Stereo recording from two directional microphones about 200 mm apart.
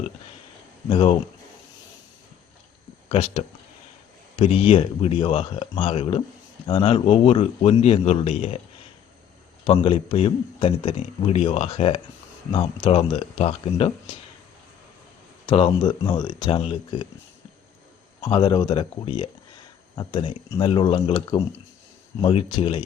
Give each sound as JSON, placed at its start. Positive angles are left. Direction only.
{"t": 0.9, "sound": "a man's voice", "side_deg": 25}
{"t": 3.1, "sound": "a man's voice", "side_deg": 30}
{"t": 9.6, "sound": "a man's voice", "side_deg": 25}
{"t": 15.4, "sound": "a man's voice", "side_deg": 25}
{"t": 18.2, "sound": "a man's voice", "side_deg": 20}